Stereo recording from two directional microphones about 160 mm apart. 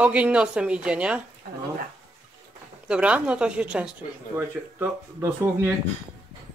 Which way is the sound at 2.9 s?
10° right (ahead or behind).